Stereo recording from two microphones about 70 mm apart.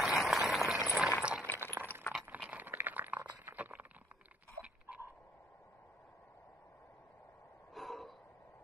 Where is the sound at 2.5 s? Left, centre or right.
Right.